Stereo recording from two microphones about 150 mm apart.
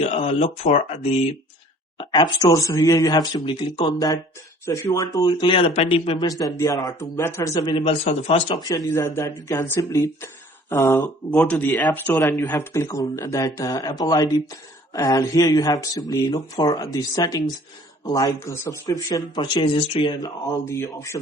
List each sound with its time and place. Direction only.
0.0 s speech: 45° left (ahead or behind)
2.0 s speech: 30° left (ahead or behind)
6.2 s speech: 25° left (ahead or behind); by 8.5 s 40° left (ahead or behind)
8.6 s speech: 25° left (ahead or behind)
11.3 s speech: 10° left (ahead or behind); by 20.3 s 30° left (ahead or behind)
20.7 s speech: 15° left (ahead or behind)